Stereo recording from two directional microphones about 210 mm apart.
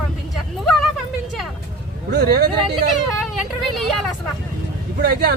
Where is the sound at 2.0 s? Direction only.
50° right (ahead or behind).